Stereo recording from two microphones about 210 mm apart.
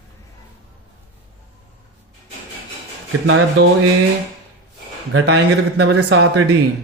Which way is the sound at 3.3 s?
75° right (ahead or behind).